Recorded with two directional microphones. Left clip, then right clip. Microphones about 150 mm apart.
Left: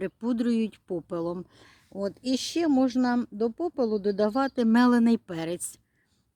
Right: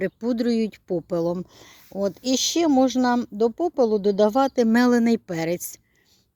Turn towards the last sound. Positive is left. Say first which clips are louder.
# right 7 dB
turn(degrees=-20)  # may be behind; listen again after turning